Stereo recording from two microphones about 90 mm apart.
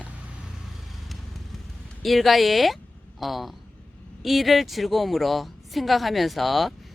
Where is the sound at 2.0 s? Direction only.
Centre (ahead or behind).